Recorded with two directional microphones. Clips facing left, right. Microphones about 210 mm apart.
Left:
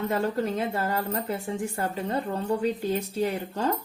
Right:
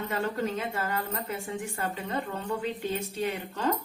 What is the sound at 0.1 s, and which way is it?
Speech, 35° left (ahead or behind).